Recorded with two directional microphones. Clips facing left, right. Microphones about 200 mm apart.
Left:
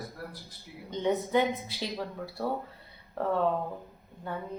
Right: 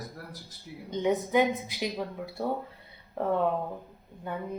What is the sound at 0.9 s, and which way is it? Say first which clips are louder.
A woman's voice: right 1 dB; 15° right (ahead or behind).